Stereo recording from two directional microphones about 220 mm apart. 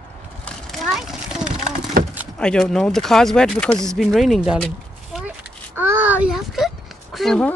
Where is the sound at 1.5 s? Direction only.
35° right (ahead or behind).